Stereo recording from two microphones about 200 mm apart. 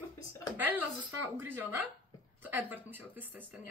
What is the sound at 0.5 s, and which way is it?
Speech, 10° right (ahead or behind).